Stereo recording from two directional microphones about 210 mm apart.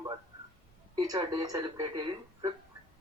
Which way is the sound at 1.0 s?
15° right (ahead or behind).